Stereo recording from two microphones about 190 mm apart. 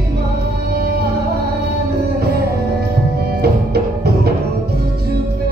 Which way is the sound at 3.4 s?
55° right (ahead or behind).